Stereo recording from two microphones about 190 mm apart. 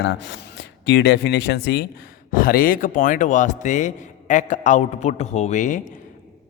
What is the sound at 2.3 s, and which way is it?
A man's voice, 50° left (ahead or behind).